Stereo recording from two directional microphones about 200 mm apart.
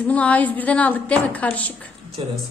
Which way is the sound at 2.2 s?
25° right (ahead or behind).